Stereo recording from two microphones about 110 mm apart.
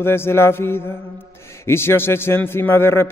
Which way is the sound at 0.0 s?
20° left (ahead or behind).